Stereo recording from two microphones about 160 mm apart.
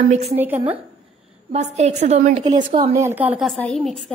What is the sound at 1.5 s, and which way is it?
Speech, 45° right (ahead or behind).